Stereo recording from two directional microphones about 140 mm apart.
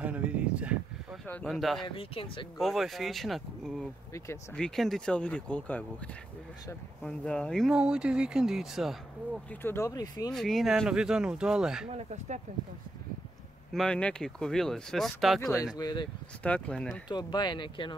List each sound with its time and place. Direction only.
0.0 s a sound: 10° right (ahead or behind)
1.2 s speech: 5° left (ahead or behind)
2.0 s speech: 40° left (ahead or behind)
2.5 s speech: centre (ahead or behind)
9.5 s speech: 15° left (ahead or behind)
10.3 s speech: centre (ahead or behind)
11.9 s speech: 55° right (ahead or behind)
13.7 s speech: 5° left (ahead or behind)
15.6 s speech: 25° left (ahead or behind)
16.4 s speech: 10° left (ahead or behind)
17.1 s speech: 30° left (ahead or behind)